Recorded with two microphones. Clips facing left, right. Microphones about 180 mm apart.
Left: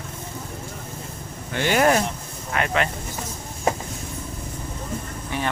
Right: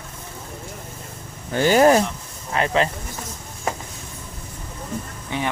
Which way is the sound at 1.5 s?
35° right (ahead or behind).